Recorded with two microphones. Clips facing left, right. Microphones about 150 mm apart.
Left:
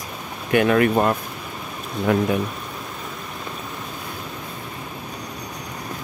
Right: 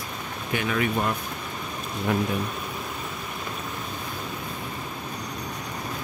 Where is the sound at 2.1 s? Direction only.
80° left.